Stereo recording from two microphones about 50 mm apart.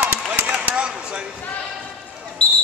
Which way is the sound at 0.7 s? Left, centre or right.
Right.